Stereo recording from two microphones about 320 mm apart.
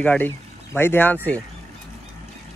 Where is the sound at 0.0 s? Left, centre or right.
Centre.